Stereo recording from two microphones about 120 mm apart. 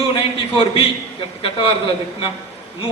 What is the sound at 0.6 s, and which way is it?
A man's voice, 50° left (ahead or behind).